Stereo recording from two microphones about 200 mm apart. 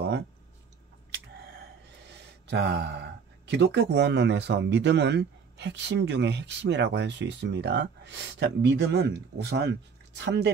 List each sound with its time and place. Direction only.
2.4 s speech: 55° right (ahead or behind)